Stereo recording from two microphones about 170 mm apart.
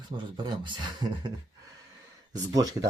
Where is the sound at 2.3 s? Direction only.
20° right (ahead or behind).